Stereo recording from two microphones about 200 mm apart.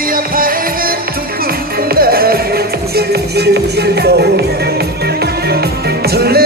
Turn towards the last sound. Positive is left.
turn(degrees=-50)  # may be behind; listen again after turning